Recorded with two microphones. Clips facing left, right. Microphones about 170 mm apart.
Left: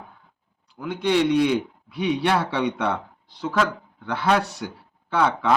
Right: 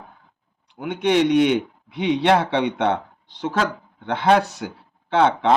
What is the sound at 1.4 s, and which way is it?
A man's voice, 25° right (ahead or behind).